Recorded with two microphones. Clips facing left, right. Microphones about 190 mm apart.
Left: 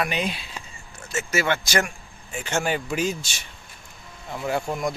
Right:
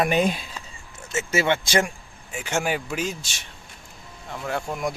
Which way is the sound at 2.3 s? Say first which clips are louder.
Even; 10° right (ahead or behind).